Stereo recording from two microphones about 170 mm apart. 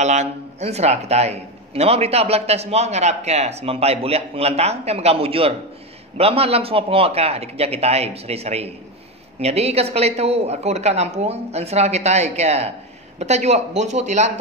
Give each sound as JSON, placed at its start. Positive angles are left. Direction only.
{"t": 0.0, "sound": "a man's voice", "side_deg": -40}